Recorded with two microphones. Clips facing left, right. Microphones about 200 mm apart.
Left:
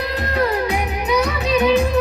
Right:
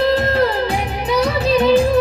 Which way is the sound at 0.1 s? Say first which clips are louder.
Right 4 dB; 30° right (ahead or behind).